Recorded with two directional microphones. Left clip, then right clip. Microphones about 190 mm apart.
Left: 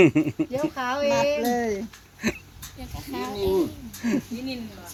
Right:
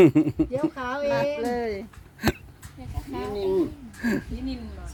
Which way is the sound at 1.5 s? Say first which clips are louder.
Left 2 dB; 45° left (ahead or behind).